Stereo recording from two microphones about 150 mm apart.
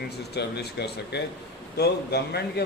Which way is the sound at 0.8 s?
90° left.